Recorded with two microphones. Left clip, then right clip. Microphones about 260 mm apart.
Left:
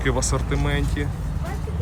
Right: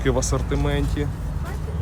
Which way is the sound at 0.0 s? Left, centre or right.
Centre.